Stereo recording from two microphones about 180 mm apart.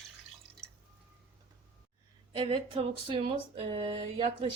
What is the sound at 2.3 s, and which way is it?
A woman's voice, 25° right (ahead or behind).